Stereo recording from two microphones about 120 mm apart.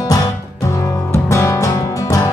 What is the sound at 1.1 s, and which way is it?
Music, 20° left (ahead or behind).